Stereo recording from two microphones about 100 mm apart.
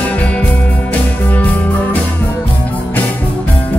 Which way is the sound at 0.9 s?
15° left (ahead or behind).